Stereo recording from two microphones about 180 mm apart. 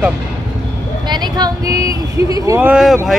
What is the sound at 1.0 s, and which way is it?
Speech, 25° right (ahead or behind).